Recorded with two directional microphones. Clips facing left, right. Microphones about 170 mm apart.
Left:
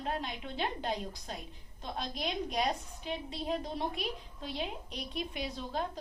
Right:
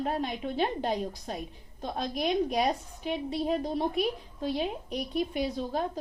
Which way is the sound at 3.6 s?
40° right (ahead or behind).